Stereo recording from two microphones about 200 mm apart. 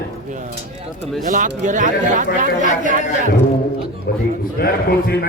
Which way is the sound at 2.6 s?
40° left (ahead or behind).